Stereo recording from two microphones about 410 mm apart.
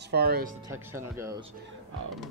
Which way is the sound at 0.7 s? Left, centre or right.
Centre.